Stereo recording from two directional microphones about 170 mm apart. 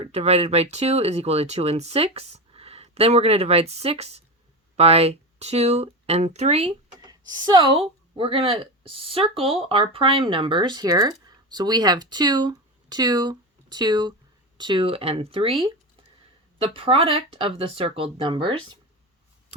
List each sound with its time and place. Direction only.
0.0 s speech: 35° right (ahead or behind)
7.0 s speech: 25° right (ahead or behind)